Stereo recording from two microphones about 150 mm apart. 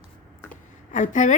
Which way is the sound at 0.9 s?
55° left (ahead or behind).